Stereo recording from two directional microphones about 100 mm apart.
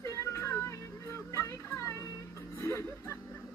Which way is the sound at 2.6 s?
30° left (ahead or behind).